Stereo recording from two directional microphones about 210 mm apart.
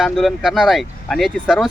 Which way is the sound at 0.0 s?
Centre (ahead or behind).